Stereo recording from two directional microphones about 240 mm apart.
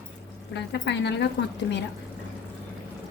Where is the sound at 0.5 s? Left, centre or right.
Left.